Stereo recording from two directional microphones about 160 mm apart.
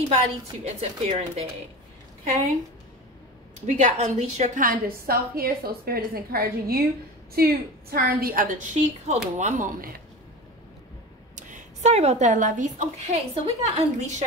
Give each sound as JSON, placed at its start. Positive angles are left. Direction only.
{"t": 0.7, "sound": "speech", "side_deg": -40}
{"t": 3.6, "sound": "a woman's voice", "side_deg": -45}
{"t": 11.3, "sound": "a woman's voice", "side_deg": -45}